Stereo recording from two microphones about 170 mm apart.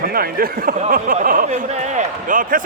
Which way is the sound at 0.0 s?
60° right (ahead or behind).